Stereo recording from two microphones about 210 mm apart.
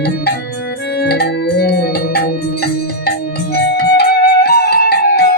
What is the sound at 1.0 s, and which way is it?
Organ, 50° left (ahead or behind).